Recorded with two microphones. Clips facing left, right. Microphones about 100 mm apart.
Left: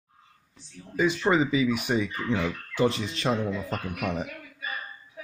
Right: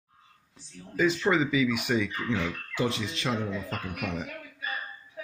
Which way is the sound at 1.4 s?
35° left (ahead or behind).